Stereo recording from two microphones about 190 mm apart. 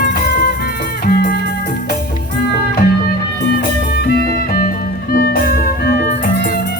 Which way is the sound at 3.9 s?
55° left (ahead or behind).